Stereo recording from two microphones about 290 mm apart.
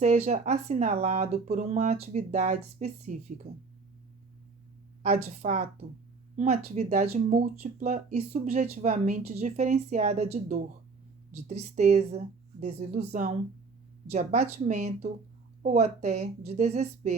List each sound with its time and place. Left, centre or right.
0.0 s speech: right
5.0 s speech: right